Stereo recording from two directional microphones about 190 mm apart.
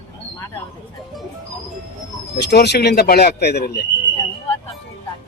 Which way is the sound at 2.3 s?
60° left (ahead or behind).